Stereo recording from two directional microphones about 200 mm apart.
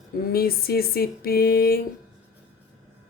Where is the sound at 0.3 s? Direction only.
50° left (ahead or behind).